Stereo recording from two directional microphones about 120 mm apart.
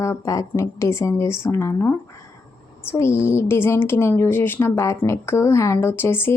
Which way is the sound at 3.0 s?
20° left (ahead or behind).